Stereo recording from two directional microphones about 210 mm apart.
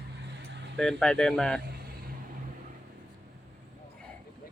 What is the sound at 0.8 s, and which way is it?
Speech, 5° left (ahead or behind).